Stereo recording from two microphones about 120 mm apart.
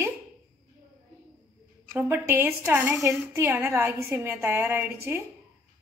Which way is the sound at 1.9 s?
15° right (ahead or behind).